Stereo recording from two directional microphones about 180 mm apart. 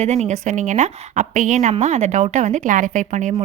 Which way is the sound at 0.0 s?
40° right (ahead or behind).